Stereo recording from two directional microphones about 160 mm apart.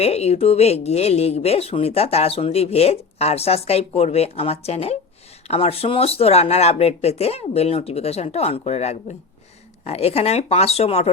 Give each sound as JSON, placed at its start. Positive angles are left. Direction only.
{"t": 0.0, "sound": "speech", "side_deg": 40}